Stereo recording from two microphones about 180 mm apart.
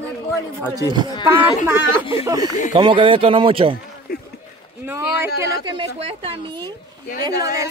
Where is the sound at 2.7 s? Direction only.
25° right (ahead or behind).